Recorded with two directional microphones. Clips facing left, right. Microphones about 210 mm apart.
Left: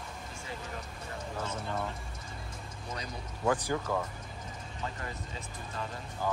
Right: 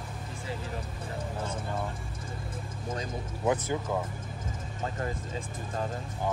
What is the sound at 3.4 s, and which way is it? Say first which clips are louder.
Speech: right 1 dB; 20° right (ahead or behind).